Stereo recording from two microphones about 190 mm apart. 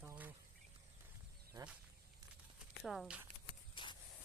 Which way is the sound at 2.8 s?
Centre (ahead or behind).